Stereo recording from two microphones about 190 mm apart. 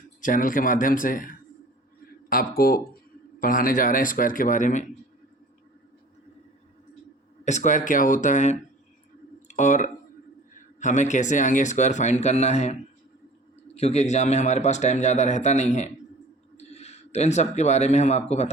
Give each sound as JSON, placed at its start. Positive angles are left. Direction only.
{"t": 0.2, "sound": "speech", "side_deg": 45}
{"t": 7.4, "sound": "speech", "side_deg": 40}
{"t": 13.7, "sound": "speech", "side_deg": 35}